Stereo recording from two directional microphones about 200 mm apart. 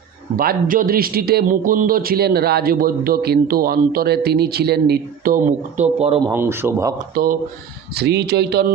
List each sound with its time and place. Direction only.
0.3 s a man's voice: 45° right (ahead or behind)
6.2 s speech: 10° right (ahead or behind)
7.2 s a man's voice: 50° right (ahead or behind)